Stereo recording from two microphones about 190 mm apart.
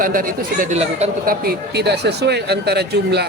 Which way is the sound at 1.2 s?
50° right (ahead or behind).